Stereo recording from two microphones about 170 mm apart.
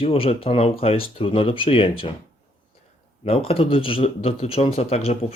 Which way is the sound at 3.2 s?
35° left (ahead or behind).